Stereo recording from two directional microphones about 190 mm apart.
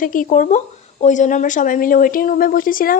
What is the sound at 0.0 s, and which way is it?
Speech, 45° left (ahead or behind).